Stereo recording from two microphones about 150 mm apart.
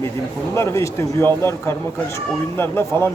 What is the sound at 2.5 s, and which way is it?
Speech, 15° left (ahead or behind).